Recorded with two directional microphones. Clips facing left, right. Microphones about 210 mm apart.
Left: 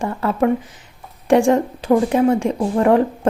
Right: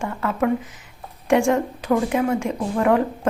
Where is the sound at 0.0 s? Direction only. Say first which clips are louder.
Left 4 dB; 30° left (ahead or behind).